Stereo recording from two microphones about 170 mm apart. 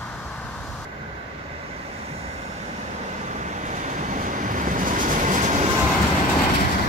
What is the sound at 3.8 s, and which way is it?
Train, 45° right (ahead or behind).